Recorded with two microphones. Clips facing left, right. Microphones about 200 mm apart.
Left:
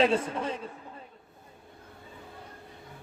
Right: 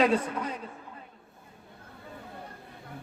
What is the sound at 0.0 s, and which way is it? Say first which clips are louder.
Speech: even; 25° left (ahead or behind).